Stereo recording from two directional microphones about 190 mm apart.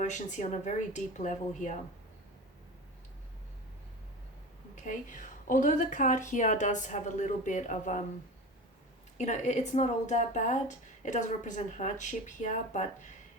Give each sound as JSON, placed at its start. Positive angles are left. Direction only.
{"t": 0.0, "sound": "a woman's voice", "side_deg": 40}
{"t": 4.7, "sound": "a woman's voice", "side_deg": 40}
{"t": 9.1, "sound": "a woman's voice", "side_deg": 40}